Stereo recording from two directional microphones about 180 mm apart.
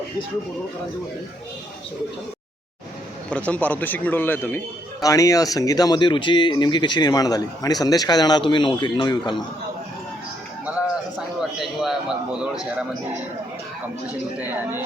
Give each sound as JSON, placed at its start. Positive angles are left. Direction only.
{"t": 3.2, "sound": "speech", "side_deg": 10}
{"t": 11.3, "sound": "a sound", "side_deg": 0}
{"t": 14.4, "sound": "speech", "side_deg": -10}